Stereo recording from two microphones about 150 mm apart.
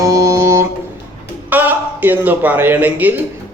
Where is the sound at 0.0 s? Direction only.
20° right (ahead or behind).